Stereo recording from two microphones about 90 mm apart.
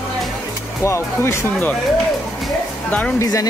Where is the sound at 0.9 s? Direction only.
30° left (ahead or behind).